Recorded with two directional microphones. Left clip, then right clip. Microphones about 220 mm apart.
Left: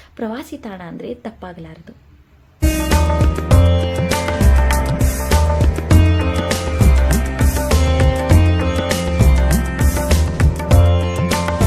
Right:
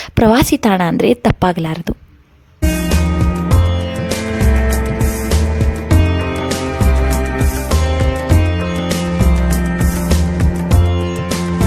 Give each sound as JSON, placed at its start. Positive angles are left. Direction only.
{"t": 0.2, "sound": "a woman's voice", "side_deg": -50}
{"t": 2.6, "sound": "music", "side_deg": 0}
{"t": 7.3, "sound": "music", "side_deg": 0}